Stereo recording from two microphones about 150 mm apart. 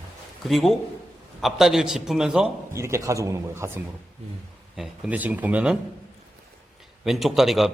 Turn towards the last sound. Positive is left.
turn(degrees=0)  # may be behind; listen again after turning